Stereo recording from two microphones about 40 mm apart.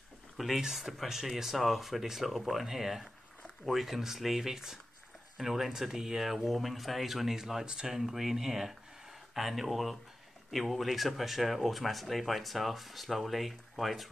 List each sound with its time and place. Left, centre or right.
0.6 s speech: centre
7.6 s speech: centre
8.0 s speech: centre